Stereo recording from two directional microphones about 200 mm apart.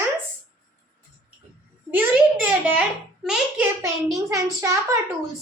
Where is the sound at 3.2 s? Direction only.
5° right (ahead or behind).